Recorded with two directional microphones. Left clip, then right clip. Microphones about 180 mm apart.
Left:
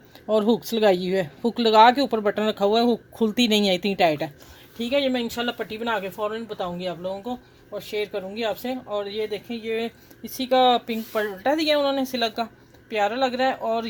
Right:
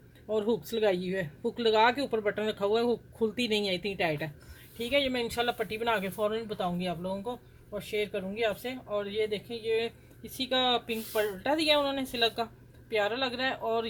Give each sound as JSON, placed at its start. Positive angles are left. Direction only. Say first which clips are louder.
{"t": 0.3, "sound": "speech", "louder": "left 8 dB", "side_deg": 45}
{"t": 4.8, "sound": "speech", "louder": "left 5 dB", "side_deg": 30}